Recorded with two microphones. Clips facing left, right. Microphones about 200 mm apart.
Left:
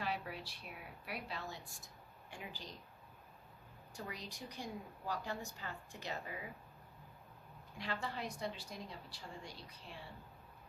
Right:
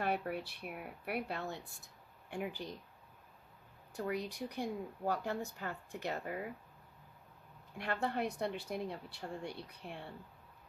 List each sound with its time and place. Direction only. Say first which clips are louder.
0.0 s speech: right 6 dB; 55° right (ahead or behind)
3.9 s speech: right 10 dB; 55° right (ahead or behind)
7.8 s speech: right 6 dB; 60° right (ahead or behind)